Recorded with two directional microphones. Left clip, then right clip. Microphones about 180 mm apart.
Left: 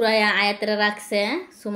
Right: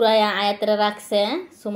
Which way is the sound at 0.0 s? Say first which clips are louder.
Right 1 dB; centre (ahead or behind).